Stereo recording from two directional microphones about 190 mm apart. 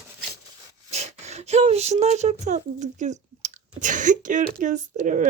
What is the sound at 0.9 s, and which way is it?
Speech, 35° right (ahead or behind).